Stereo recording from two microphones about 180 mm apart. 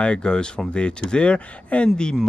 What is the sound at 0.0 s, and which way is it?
Speech, 5° left (ahead or behind).